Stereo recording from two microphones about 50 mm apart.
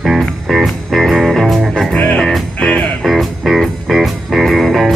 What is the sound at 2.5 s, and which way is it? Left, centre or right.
Music, left.